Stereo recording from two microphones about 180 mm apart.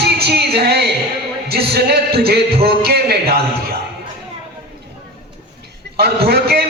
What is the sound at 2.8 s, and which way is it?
Speech, 60° right (ahead or behind).